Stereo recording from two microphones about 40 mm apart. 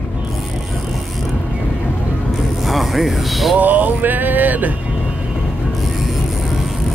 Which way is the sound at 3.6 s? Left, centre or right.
Right.